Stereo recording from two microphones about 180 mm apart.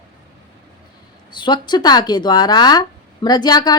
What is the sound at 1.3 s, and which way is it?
A woman's voice, 25° left (ahead or behind).